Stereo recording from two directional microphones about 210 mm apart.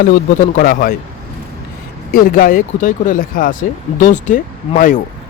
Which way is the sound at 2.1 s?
40° left (ahead or behind).